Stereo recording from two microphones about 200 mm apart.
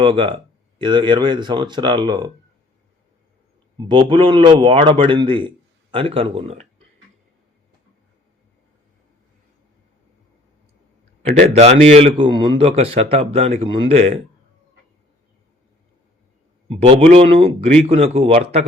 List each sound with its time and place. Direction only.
0.0 s a man's voice: 25° right (ahead or behind)
3.8 s a man's voice: 25° right (ahead or behind)
11.4 s a man's voice: 35° right (ahead or behind)
16.6 s a man's voice: 30° right (ahead or behind)